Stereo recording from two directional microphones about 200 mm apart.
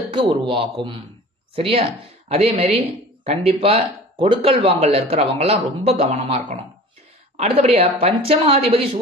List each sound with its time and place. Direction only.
0.1 s a woman's voice: 25° right (ahead or behind)